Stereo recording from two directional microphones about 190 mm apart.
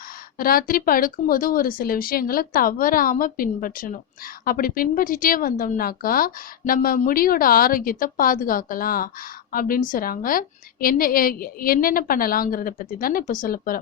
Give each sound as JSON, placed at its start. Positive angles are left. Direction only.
{"t": 0.3, "sound": "a woman's voice", "side_deg": 50}